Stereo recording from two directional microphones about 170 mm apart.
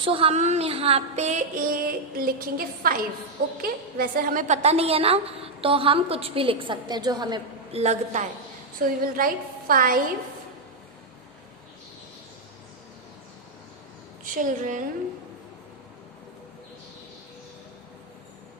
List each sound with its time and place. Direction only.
0.0 s a woman's voice: 30° right (ahead or behind)
8.8 s a woman's voice: 55° right (ahead or behind)
14.3 s a woman's voice: 50° right (ahead or behind)